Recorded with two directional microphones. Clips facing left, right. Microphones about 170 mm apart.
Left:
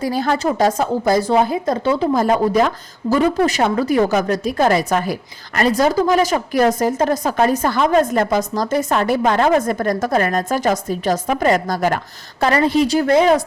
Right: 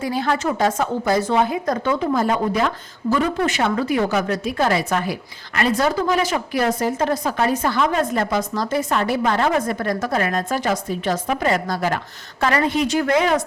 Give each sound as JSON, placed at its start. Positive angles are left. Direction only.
{"t": 0.0, "sound": "a woman's voice", "side_deg": 40}
{"t": 12.4, "sound": "a woman's voice", "side_deg": 35}